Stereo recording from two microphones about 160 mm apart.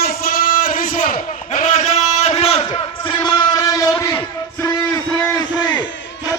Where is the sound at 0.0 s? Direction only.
70° left (ahead or behind).